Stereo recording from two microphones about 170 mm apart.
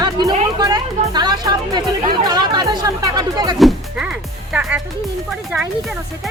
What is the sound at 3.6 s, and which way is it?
Speech, 5° right (ahead or behind).